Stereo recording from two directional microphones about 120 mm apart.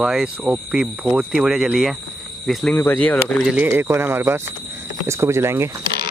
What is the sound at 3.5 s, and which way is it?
Speech, 10° right (ahead or behind).